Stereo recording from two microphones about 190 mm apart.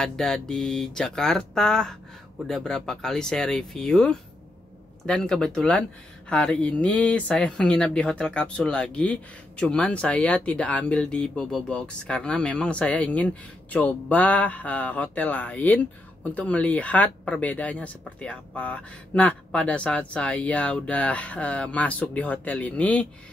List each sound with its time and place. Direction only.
0.0 s speech: 5° left (ahead or behind)